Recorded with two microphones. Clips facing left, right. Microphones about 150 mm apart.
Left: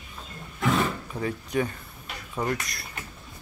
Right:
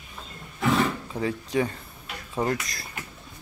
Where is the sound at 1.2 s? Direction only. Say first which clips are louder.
Right 2 dB; 30° right (ahead or behind).